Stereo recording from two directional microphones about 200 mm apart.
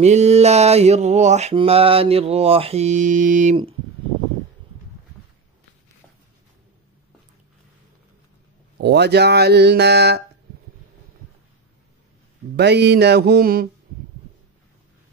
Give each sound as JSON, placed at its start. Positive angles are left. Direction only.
{"t": 0.0, "sound": "mantra", "side_deg": -35}
{"t": 8.7, "sound": "speech", "side_deg": -55}
{"t": 12.5, "sound": "speech", "side_deg": -55}